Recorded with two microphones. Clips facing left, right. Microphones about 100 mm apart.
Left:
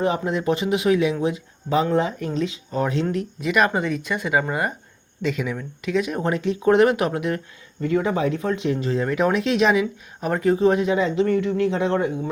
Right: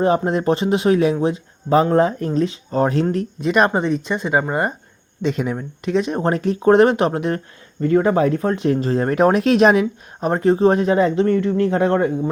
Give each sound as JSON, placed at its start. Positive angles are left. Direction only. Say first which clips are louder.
{"t": 0.0, "sound": "speech", "louder": "right 5 dB", "side_deg": -40}
{"t": 5.2, "sound": "speech", "louder": "right 4 dB", "side_deg": -40}
{"t": 9.8, "sound": "speech", "louder": "right 4 dB", "side_deg": -30}